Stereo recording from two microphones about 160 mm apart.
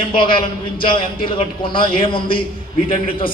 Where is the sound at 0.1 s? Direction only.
30° left (ahead or behind).